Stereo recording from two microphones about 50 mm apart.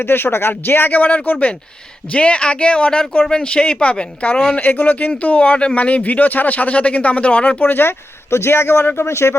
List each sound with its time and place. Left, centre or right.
0.0 s speech: left
7.7 s speech: left
9.0 s speech: left